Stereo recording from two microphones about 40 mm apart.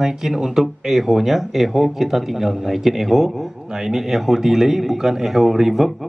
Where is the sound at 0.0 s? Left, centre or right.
Centre.